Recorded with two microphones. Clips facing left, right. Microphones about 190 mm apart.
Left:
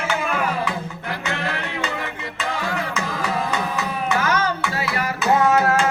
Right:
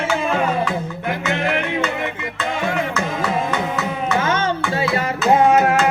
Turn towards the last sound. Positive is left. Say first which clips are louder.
# right 3 dB
turn(degrees=-20)  # may be behind; listen again after turning